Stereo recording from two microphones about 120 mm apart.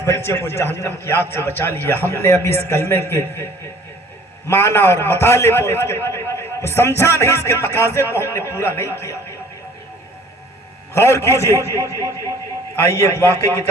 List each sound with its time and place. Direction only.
0.0 s a man's voice: 20° left (ahead or behind)
4.4 s a man's voice: 20° left (ahead or behind)
10.9 s a man's voice: 20° left (ahead or behind)
13.0 s a man's voice: 20° left (ahead or behind)